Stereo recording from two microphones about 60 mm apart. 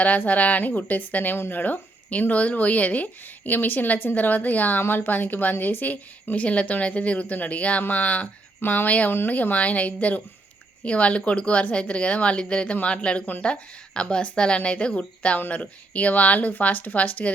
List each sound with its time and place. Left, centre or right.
0.0 s a woman's voice: left